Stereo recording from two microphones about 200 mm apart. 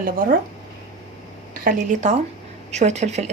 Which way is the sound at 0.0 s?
45° right (ahead or behind).